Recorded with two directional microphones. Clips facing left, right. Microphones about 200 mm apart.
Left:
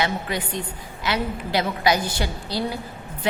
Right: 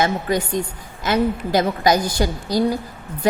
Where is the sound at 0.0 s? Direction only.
45° right (ahead or behind).